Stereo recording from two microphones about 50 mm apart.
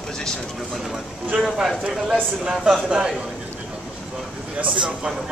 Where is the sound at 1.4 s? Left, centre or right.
Centre.